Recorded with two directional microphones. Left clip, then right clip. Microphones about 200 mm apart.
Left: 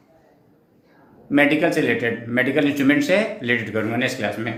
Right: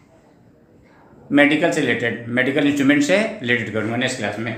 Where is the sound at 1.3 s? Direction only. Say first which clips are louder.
Right 2 dB; 10° left (ahead or behind).